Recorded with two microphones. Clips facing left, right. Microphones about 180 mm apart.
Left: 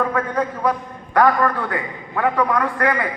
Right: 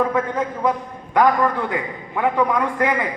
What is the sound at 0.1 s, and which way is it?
A man's voice, 20° right (ahead or behind).